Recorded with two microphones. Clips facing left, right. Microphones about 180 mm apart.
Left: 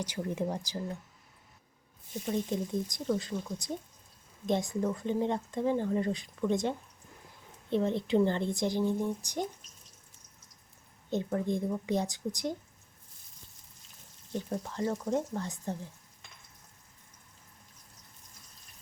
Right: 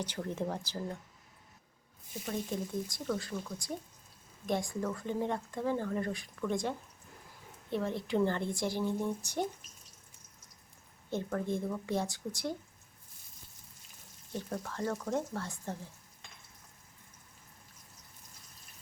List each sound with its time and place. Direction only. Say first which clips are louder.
0.0 s a woman's voice: left 3 dB; 10° left (ahead or behind)
2.2 s speech: left 4 dB; 20° left (ahead or behind)
11.1 s a woman's voice: left 3 dB; 20° left (ahead or behind)
14.3 s a woman's voice: left 3 dB; 15° left (ahead or behind)